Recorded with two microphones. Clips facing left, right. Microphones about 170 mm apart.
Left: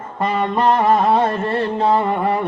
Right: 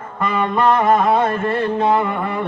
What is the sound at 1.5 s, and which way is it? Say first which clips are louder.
Carnatic music: even; 30° left (ahead or behind).